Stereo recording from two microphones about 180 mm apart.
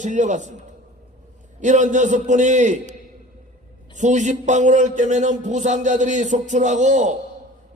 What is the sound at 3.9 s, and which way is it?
A man's voice, 40° right (ahead or behind).